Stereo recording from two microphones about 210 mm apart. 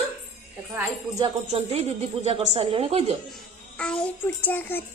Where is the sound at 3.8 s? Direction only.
5° left (ahead or behind).